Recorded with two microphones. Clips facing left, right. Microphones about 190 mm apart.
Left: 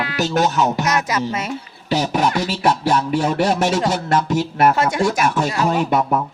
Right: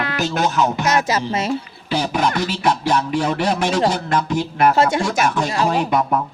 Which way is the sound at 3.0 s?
45° left (ahead or behind).